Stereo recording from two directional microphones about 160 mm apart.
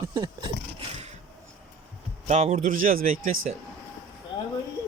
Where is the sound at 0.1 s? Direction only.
25° right (ahead or behind).